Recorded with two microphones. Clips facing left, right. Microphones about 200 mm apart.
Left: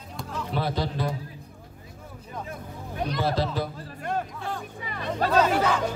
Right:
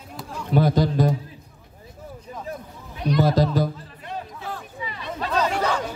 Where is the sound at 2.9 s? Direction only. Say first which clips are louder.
Right 5 dB; 45° left (ahead or behind).